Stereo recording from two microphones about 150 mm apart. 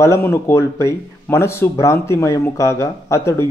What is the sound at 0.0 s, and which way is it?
A man's voice, 15° left (ahead or behind).